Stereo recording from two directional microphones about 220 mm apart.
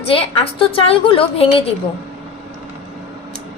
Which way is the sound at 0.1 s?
25° left (ahead or behind).